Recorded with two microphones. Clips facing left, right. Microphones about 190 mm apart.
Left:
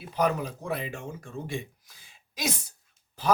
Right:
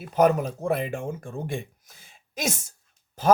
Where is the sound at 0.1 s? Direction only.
45° right (ahead or behind).